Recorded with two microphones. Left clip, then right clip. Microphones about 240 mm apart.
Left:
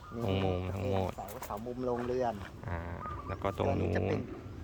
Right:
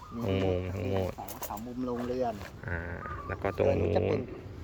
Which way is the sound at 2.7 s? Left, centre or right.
Centre.